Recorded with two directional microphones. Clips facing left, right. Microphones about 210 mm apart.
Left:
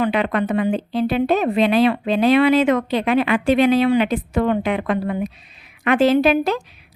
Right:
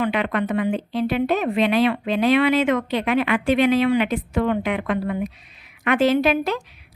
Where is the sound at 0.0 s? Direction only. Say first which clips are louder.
Left 3 dB; 35° left (ahead or behind).